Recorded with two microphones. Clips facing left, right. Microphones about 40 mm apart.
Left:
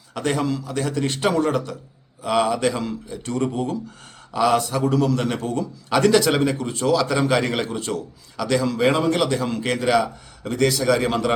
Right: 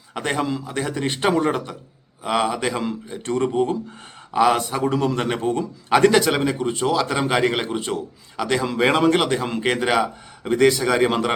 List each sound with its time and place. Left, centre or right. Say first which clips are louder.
0.1 s a man's voice: left 1 dB; right
8.9 s a man's voice: right 5 dB; right
9.2 s a man's voice: right 1 dB; right